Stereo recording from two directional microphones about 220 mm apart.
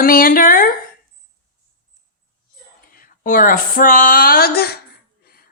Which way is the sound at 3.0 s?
40° left (ahead or behind).